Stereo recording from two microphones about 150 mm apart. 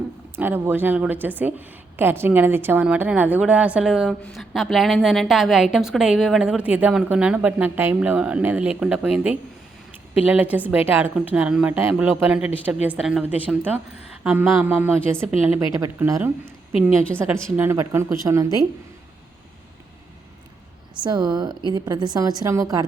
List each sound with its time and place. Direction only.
0.3 s a woman's voice: 15° right (ahead or behind)
20.9 s a woman's voice: 30° right (ahead or behind)